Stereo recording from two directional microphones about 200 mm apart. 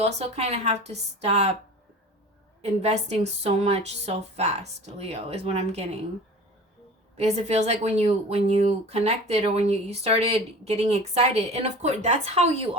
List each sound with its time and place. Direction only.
0.0 s speech: 30° right (ahead or behind)
2.6 s speech: 30° right (ahead or behind)
7.2 s speech: 35° right (ahead or behind)